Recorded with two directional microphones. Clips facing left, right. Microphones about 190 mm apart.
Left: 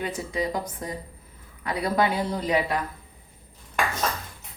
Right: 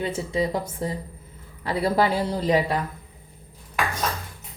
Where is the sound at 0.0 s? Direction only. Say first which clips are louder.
Right 3 dB; 30° right (ahead or behind).